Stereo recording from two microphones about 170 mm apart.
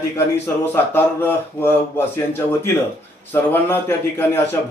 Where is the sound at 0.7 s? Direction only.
15° left (ahead or behind).